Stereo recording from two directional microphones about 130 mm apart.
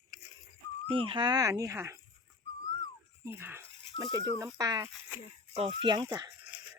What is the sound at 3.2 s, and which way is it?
Rattle, 20° right (ahead or behind).